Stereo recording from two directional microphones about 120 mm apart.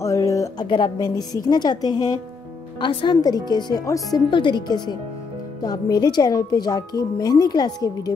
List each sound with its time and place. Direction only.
0.0 s music: 25° left (ahead or behind)
0.7 s speech: 40° left (ahead or behind)
0.9 s speech: 30° left (ahead or behind)
4.3 s speech: 40° left (ahead or behind)